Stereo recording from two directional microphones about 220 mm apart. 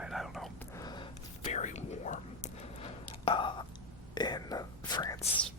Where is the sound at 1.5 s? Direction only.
30° left (ahead or behind).